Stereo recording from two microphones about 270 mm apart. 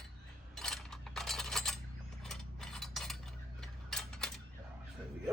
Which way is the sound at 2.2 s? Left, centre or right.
Centre.